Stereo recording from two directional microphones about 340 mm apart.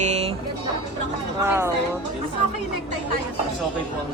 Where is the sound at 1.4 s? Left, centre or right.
Centre.